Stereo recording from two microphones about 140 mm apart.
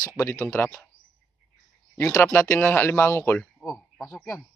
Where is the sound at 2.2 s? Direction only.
20° left (ahead or behind).